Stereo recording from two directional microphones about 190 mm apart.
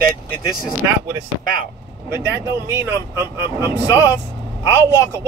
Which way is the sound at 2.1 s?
15° right (ahead or behind).